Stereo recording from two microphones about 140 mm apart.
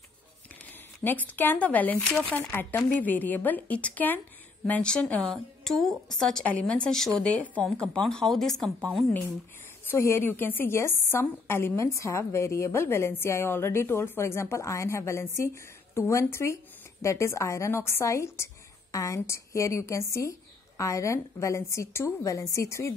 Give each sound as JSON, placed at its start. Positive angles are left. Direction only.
{"t": 1.0, "sound": "a woman's voice", "side_deg": 10}
{"t": 9.8, "sound": "a woman's voice", "side_deg": 15}